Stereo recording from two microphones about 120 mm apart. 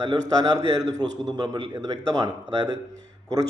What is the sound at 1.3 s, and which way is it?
Speech, 35° right (ahead or behind).